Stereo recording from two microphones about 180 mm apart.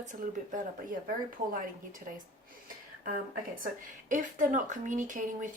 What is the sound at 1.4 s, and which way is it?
Speech, 40° right (ahead or behind).